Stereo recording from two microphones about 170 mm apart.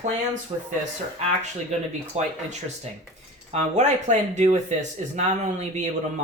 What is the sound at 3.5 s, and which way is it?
Speech, 40° right (ahead or behind).